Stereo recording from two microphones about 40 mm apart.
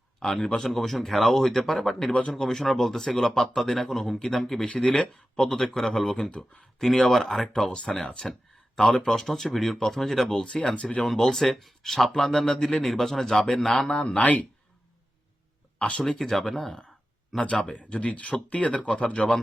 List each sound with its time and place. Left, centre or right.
0.2 s speech: centre
4.7 s speech: left
5.5 s speech: centre
7.7 s speech: centre
8.2 s a sound: centre
9.0 s speech: centre
10.6 s speech: left
11.0 s speech: centre
13.8 s speech: left
16.0 s speech: centre
17.3 s speech: left